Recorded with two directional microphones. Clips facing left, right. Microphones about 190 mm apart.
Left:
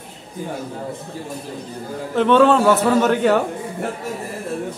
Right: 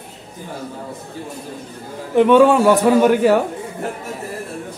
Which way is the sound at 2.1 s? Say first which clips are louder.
Right 3 dB; 10° right (ahead or behind).